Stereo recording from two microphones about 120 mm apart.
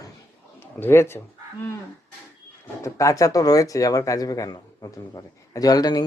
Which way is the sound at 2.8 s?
25° left (ahead or behind).